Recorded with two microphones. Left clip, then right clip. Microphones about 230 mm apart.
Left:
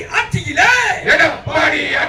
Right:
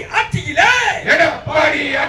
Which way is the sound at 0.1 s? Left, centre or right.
Left.